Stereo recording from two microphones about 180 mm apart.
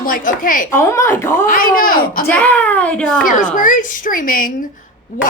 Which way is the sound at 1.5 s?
50° left (ahead or behind).